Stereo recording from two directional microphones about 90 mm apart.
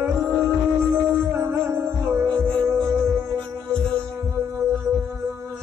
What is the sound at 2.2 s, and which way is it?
Music, 15° left (ahead or behind).